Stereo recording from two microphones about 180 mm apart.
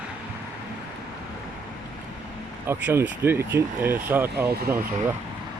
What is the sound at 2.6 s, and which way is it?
Speech, 10° right (ahead or behind).